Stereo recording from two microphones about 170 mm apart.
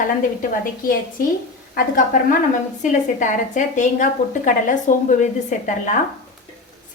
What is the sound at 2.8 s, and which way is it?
A woman's voice, 45° left (ahead or behind).